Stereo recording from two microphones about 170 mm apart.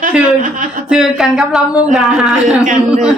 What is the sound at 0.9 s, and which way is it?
A woman's voice, centre (ahead or behind).